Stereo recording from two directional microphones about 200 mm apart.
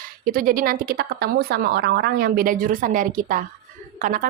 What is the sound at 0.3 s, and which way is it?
Speech, 45° right (ahead or behind).